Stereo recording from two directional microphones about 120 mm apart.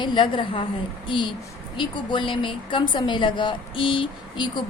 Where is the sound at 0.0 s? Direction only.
40° left (ahead or behind).